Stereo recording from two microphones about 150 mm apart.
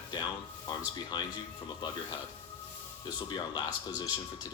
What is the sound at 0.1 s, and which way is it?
Speech, 30° left (ahead or behind).